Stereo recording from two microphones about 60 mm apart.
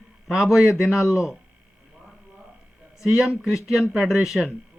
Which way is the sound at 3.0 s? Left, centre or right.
Centre.